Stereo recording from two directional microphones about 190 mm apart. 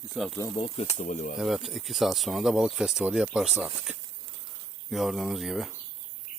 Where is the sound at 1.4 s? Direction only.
Centre (ahead or behind).